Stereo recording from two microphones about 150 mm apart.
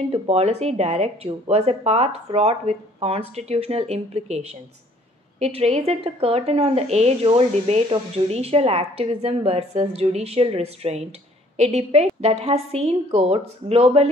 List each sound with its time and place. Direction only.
0.1 s speech: 45° right (ahead or behind)